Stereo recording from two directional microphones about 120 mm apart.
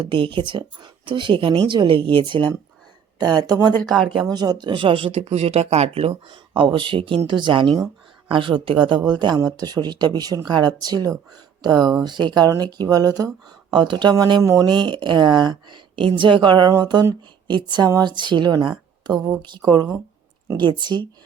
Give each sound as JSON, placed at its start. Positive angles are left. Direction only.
{"t": 0.0, "sound": "a woman's voice", "side_deg": -45}
{"t": 3.8, "sound": "speech", "side_deg": 0}
{"t": 4.3, "sound": "a woman's voice", "side_deg": -35}
{"t": 13.7, "sound": "a woman's voice", "side_deg": -40}
{"t": 14.4, "sound": "speech", "side_deg": -25}
{"t": 14.8, "sound": "a woman's voice", "side_deg": -40}